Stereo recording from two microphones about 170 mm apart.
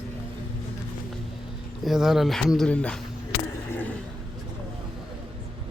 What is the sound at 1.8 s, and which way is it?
Speech, centre (ahead or behind).